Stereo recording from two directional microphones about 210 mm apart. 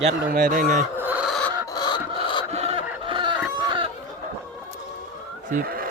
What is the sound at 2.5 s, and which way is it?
Chicken, 30° right (ahead or behind).